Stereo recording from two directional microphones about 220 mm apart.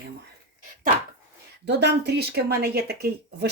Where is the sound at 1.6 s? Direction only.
50° right (ahead or behind).